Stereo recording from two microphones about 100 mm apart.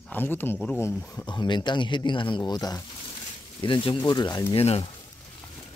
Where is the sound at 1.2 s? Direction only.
50° left (ahead or behind).